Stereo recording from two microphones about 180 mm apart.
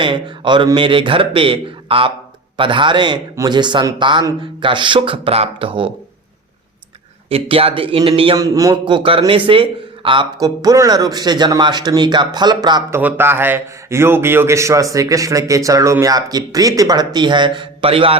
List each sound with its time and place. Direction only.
0.0 s a man's voice: 25° right (ahead or behind)
7.3 s a man's voice: 30° right (ahead or behind)
13.0 s a man's voice: 10° right (ahead or behind); by 18.2 s 30° right (ahead or behind)